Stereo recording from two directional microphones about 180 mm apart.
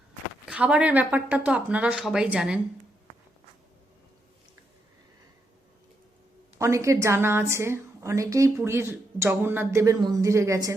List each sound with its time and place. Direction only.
0.4 s a woman's voice: 5° right (ahead or behind)
6.6 s a woman's voice: 15° right (ahead or behind)